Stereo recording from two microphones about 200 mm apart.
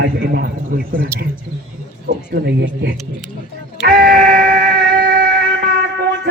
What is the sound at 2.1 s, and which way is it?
Speech, 55° right (ahead or behind).